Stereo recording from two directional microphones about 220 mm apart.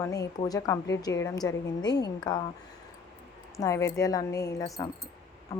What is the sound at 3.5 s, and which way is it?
Speech, 15° left (ahead or behind).